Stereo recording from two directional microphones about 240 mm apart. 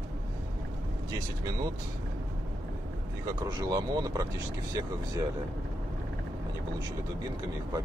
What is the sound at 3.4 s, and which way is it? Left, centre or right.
Speech, centre.